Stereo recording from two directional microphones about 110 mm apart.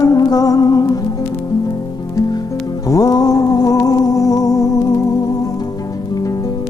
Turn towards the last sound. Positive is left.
turn(degrees=35)  # may be behind; listen again after turning